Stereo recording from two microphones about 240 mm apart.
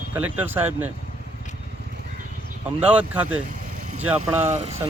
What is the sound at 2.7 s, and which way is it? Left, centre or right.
Speech, centre.